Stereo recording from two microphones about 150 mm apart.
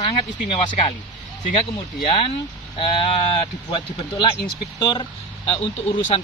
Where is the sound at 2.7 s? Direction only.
35° left (ahead or behind).